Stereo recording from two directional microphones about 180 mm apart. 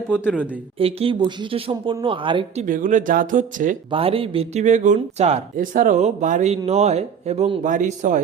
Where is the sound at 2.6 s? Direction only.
50° right (ahead or behind).